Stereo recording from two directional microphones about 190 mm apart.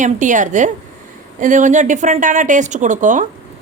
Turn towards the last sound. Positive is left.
turn(degrees=-40)  # may be behind; listen again after turning